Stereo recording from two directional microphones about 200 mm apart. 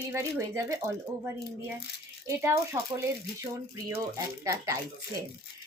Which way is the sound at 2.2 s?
15° right (ahead or behind).